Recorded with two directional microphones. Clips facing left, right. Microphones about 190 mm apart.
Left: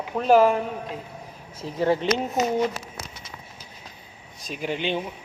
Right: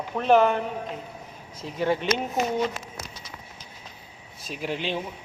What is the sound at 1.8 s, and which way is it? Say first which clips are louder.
Speech: left 3 dB; 30° left (ahead or behind).